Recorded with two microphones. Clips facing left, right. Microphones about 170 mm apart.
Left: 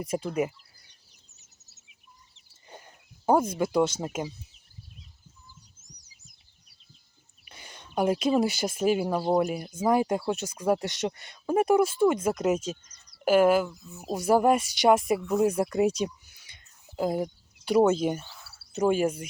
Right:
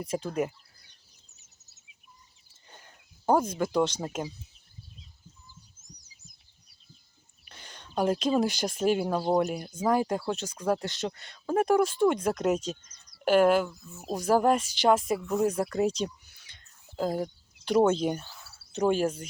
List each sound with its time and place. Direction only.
0.0 s speech: 10° left (ahead or behind)
3.2 s speech: 10° left (ahead or behind)
7.4 s speech: 10° left (ahead or behind)
13.8 s speech: 15° left (ahead or behind)